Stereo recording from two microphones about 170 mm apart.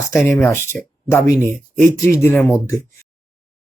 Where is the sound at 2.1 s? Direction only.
15° left (ahead or behind).